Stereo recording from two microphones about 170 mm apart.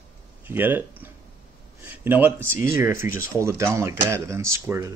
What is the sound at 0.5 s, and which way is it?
Speech, 10° right (ahead or behind).